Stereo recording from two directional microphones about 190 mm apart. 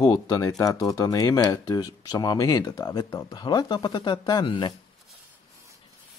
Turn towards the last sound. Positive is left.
turn(degrees=25)  # may be behind; listen again after turning